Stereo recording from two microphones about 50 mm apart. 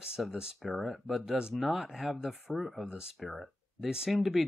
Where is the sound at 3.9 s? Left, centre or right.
Centre.